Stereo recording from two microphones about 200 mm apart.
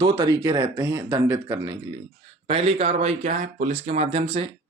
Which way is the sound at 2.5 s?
30° right (ahead or behind).